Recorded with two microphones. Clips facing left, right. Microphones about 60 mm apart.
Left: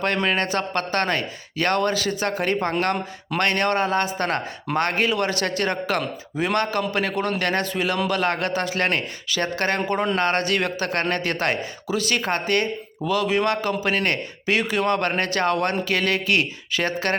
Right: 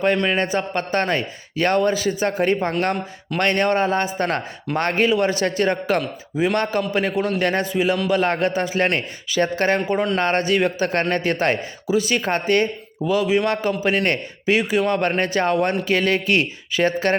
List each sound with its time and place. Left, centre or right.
0.3 s a man's voice: centre
6.3 s a man's voice: centre
6.6 s a man's voice: right